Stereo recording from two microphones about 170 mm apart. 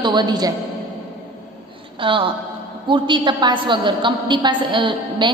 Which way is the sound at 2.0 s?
30° right (ahead or behind).